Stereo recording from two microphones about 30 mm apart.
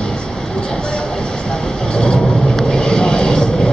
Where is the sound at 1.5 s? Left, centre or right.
Left.